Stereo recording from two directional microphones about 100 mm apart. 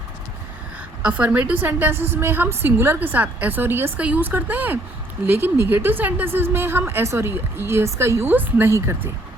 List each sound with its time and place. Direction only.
1.0 s a woman's voice: 15° right (ahead or behind)